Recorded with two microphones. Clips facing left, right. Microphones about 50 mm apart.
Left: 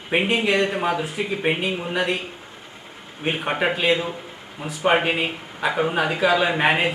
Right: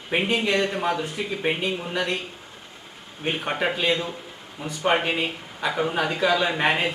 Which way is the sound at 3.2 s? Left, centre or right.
Centre.